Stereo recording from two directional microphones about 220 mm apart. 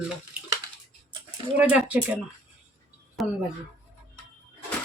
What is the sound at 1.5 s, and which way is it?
Speech, 5° right (ahead or behind).